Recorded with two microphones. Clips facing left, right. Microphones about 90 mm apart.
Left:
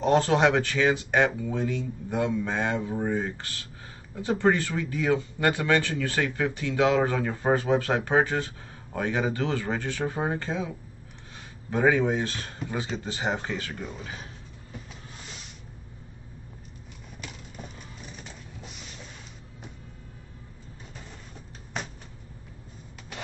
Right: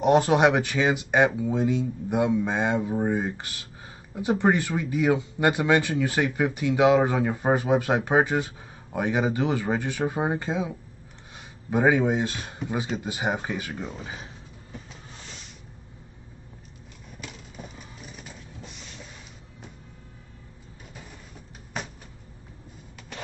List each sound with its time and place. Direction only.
0.0 s speech: 15° right (ahead or behind)
11.7 s speech: 15° right (ahead or behind)
17.2 s printer: centre (ahead or behind)